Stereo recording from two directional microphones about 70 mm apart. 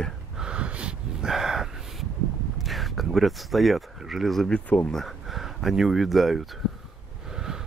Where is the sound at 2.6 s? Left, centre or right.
Centre.